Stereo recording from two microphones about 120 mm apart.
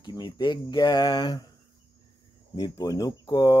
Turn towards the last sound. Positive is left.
turn(degrees=35)  # may be behind; listen again after turning